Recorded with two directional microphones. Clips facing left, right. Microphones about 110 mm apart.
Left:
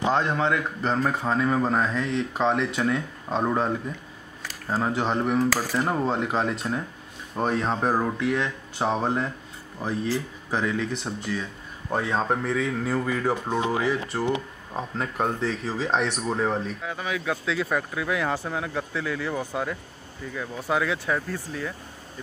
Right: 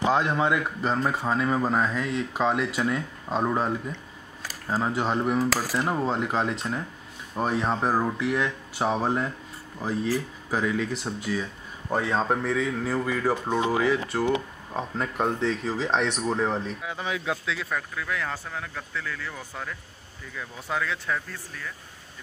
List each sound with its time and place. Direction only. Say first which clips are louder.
0.1 s a man's voice: even; 10° right (ahead or behind)
10.5 s a man's voice: even; 5° right (ahead or behind)
11.9 s speech: even; centre (ahead or behind)
16.8 s speech: left 1 dB; 20° right (ahead or behind)
17.6 s speech: left 4 dB; 20° left (ahead or behind)
20.3 s speech: left 4 dB; 5° left (ahead or behind)